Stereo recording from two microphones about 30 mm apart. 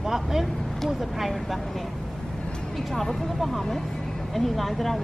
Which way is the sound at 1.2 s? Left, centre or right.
Centre.